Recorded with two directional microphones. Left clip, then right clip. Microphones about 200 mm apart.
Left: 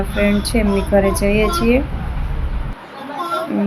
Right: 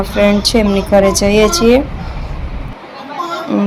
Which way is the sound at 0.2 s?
10° right (ahead or behind).